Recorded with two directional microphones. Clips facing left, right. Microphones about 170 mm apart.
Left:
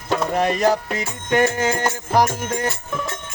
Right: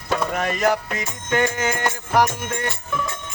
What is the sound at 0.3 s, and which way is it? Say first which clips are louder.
Music: left 4 dB; 30° left (ahead or behind).